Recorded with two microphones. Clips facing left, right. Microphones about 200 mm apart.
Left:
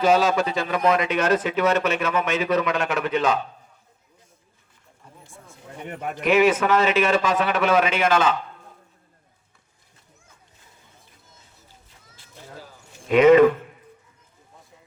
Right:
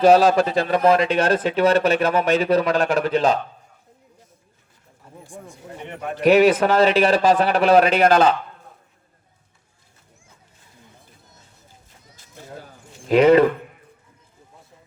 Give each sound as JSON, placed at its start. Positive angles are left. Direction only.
{"t": 0.0, "sound": "a man's voice", "side_deg": -35}
{"t": 5.2, "sound": "speech", "side_deg": -15}
{"t": 6.2, "sound": "a man's voice", "side_deg": -35}
{"t": 12.1, "sound": "a sound", "side_deg": -45}